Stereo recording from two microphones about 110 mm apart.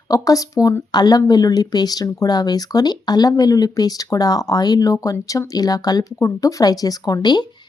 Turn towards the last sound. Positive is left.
turn(degrees=40)  # may be behind; listen again after turning